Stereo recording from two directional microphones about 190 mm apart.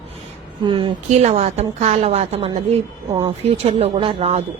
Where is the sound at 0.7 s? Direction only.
25° right (ahead or behind).